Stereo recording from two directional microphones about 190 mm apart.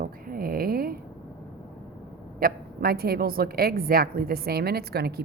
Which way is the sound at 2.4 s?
55° right (ahead or behind).